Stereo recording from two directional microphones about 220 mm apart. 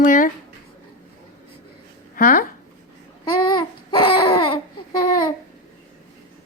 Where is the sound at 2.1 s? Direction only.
40° left (ahead or behind).